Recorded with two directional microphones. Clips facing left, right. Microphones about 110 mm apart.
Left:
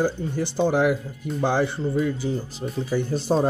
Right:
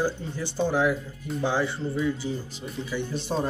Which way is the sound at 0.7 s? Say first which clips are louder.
Left 2 dB; 65° left (ahead or behind).